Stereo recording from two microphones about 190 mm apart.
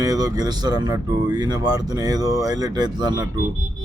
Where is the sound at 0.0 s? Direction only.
20° right (ahead or behind).